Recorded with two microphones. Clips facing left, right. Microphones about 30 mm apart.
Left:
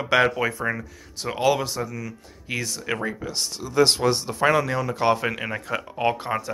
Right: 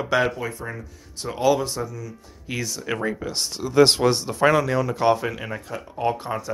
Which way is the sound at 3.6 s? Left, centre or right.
Centre.